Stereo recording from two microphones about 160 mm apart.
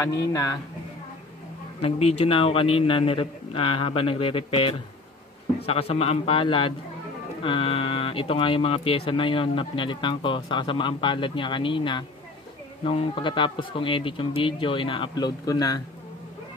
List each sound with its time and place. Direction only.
0.3 s speech: 20° left (ahead or behind)
1.8 s speech: 40° left (ahead or behind); by 15.8 s 25° left (ahead or behind)